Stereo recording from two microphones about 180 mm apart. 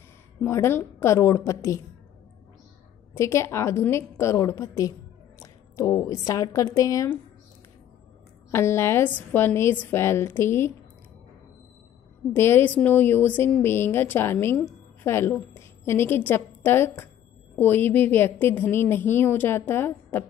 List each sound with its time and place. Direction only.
0.5 s a woman's voice: 15° left (ahead or behind)
3.2 s a woman's voice: 15° left (ahead or behind)
8.5 s a woman's voice: 15° left (ahead or behind)
12.4 s a woman's voice: 10° left (ahead or behind)